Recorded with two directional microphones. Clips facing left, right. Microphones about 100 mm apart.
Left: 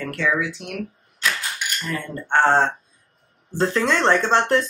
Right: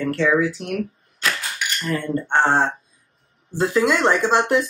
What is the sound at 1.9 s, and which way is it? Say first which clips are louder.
Speech: right 4 dB; 25° right (ahead or behind).